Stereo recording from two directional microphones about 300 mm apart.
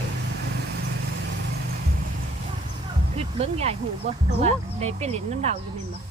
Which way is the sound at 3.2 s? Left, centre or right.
Right.